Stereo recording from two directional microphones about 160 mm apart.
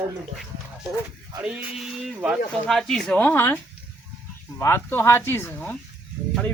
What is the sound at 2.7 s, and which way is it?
A man's voice, centre (ahead or behind).